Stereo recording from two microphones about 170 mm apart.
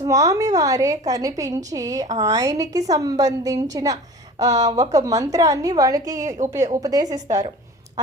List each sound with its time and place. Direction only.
0.0 s a woman's voice: 20° right (ahead or behind)